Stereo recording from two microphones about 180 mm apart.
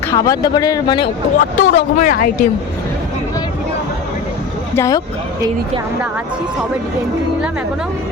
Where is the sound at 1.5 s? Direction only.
40° left (ahead or behind).